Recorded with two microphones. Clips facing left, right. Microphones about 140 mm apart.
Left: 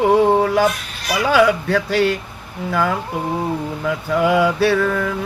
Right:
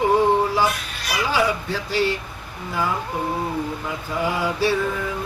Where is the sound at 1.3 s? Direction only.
70° left (ahead or behind).